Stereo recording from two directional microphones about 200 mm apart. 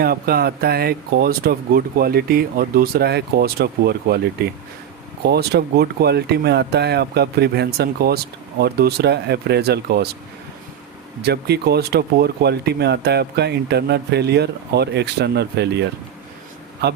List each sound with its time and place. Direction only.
0.0 s speech: 50° right (ahead or behind)
11.2 s speech: 55° right (ahead or behind)